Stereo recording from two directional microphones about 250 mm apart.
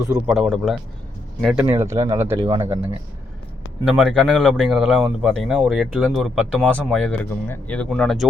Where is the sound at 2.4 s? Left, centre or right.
Right.